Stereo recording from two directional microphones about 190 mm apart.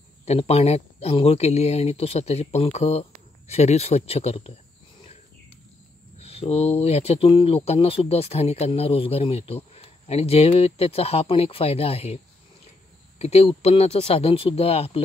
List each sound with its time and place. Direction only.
0.2 s speech: 35° left (ahead or behind)
6.1 s speech: 30° left (ahead or behind)
13.2 s speech: 35° left (ahead or behind)